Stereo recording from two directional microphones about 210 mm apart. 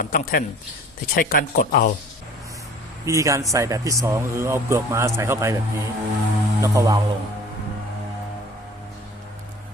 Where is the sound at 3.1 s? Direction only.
15° right (ahead or behind).